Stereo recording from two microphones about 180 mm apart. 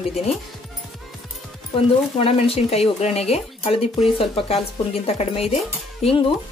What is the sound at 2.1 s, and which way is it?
Speech, 35° left (ahead or behind).